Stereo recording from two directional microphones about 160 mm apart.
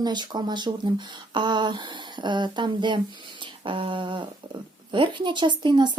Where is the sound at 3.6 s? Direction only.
30° right (ahead or behind).